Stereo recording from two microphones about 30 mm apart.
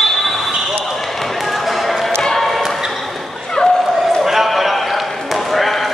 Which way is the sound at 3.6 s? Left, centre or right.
Left.